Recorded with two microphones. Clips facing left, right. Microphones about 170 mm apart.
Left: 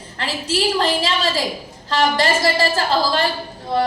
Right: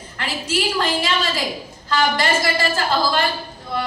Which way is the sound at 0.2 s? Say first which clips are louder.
Left 2 dB; 35° left (ahead or behind).